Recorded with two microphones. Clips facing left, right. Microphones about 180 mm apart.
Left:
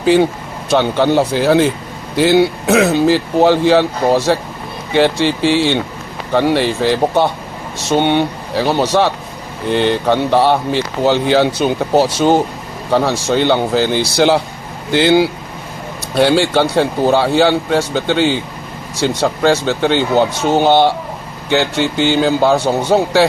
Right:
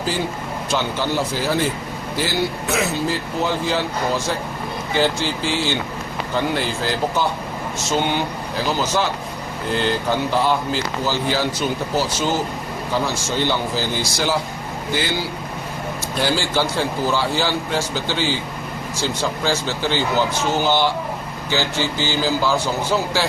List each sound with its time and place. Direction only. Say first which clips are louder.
0.0 s speech: left 12 dB; 70° left (ahead or behind)